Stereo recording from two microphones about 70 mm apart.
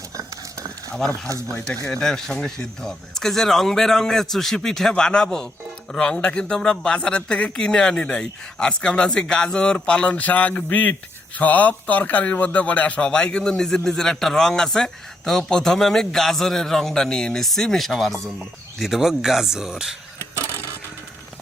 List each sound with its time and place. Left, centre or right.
0.9 s a man's voice: centre